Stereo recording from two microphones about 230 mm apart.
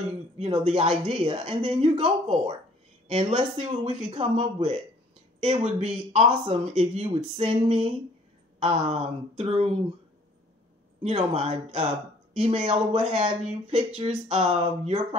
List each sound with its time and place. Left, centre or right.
0.4 s speech: right
5.8 s speech: right
11.0 s speech: right